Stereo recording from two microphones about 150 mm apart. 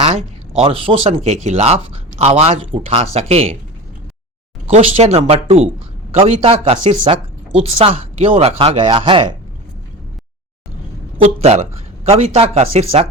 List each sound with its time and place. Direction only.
0.0 s speech: 45° right (ahead or behind)
4.7 s speech: 40° right (ahead or behind)
11.2 s speech: 45° right (ahead or behind)